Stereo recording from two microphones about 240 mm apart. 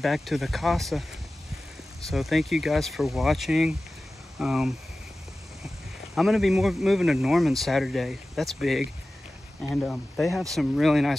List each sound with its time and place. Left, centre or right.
0.0 s speech: centre
2.0 s speech: centre
6.1 s speech: centre